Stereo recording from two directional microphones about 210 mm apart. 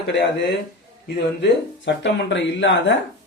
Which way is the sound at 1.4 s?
55° left (ahead or behind).